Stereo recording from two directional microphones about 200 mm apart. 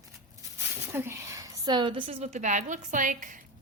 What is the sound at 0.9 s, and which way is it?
A woman's voice, 10° right (ahead or behind).